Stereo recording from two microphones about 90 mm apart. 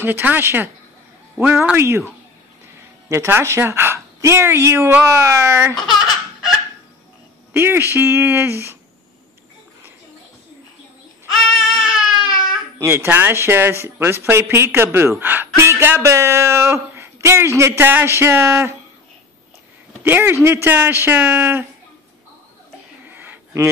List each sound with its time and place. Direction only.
0.0 s a woman's voice: 20° right (ahead or behind)
7.5 s speech: 25° right (ahead or behind)
11.3 s a sound: centre (ahead or behind)
12.7 s speech: 30° right (ahead or behind)
20.0 s speech: 25° right (ahead or behind)
23.0 s a sound: 25° right (ahead or behind)